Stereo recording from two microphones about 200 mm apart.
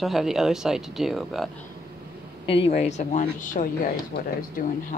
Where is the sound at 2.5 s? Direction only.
30° left (ahead or behind).